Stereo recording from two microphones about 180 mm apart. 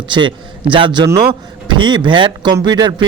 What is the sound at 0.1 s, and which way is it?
A man's voice, 25° right (ahead or behind).